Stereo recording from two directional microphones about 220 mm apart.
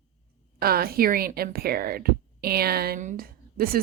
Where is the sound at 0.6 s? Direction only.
45° right (ahead or behind).